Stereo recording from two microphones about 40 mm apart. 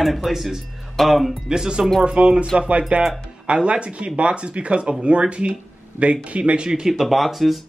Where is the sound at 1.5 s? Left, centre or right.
Centre.